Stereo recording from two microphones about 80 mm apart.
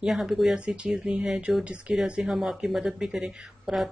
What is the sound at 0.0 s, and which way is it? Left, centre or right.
Speech, centre.